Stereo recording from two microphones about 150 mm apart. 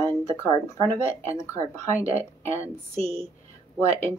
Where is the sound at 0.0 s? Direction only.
20° left (ahead or behind).